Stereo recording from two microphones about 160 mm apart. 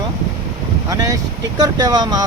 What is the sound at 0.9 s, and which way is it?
Speech, 20° right (ahead or behind).